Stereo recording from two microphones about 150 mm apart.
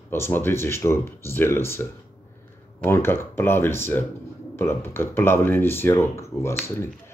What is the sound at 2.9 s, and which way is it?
Speech, 15° left (ahead or behind).